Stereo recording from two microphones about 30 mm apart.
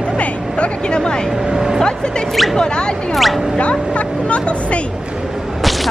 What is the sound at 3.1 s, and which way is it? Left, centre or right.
Speech, centre.